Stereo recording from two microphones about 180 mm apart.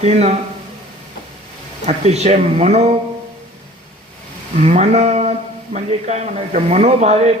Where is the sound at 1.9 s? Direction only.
35° right (ahead or behind).